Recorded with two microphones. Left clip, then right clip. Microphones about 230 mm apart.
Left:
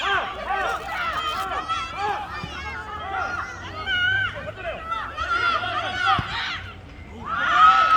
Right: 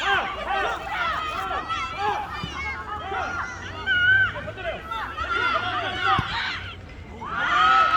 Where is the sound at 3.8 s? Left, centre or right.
Left.